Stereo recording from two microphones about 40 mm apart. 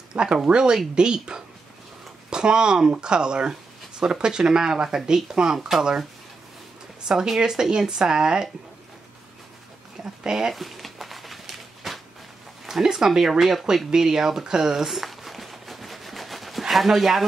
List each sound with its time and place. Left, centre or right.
0.1 s speech: right
7.1 s speech: centre
10.2 s speech: centre
10.5 s a sound: centre
12.6 s speech: centre
14.9 s a sound: centre